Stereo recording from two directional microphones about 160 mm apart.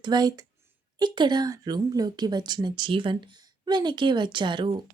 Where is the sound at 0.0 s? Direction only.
25° right (ahead or behind).